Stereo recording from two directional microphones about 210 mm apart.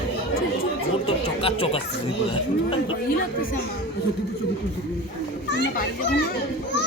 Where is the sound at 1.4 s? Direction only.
25° left (ahead or behind).